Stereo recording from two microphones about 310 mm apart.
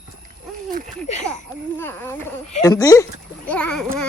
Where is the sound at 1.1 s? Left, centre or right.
Left.